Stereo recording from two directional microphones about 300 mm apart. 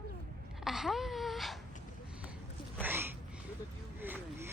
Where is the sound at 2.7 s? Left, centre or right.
Centre.